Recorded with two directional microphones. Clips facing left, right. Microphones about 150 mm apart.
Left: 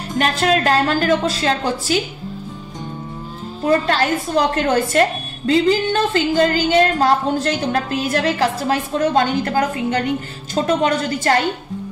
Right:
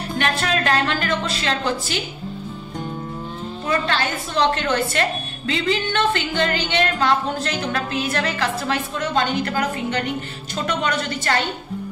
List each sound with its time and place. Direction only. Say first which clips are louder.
0.2 s a woman's voice: left 6 dB; 35° left (ahead or behind)
3.6 s a woman's voice: left 6 dB; 40° left (ahead or behind)